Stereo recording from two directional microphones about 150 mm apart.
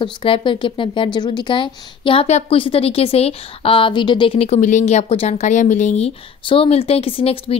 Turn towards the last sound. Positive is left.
turn(degrees=40)  # may be behind; listen again after turning